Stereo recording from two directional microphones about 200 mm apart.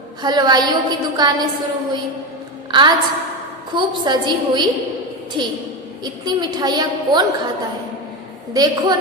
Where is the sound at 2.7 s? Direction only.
25° right (ahead or behind).